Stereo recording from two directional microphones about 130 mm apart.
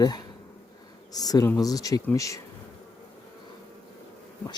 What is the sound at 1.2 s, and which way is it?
Speech, 30° left (ahead or behind).